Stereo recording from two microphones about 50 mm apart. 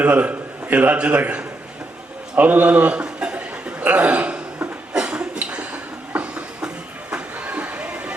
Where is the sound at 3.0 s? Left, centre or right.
Right.